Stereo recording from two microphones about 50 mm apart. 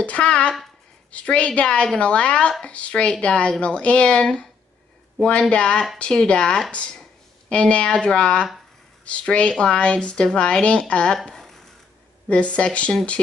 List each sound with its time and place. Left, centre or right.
0.0 s a woman's voice: left
5.5 s a woman's voice: left
6.7 s a sound: centre
7.5 s a woman's voice: left
12.3 s a woman's voice: left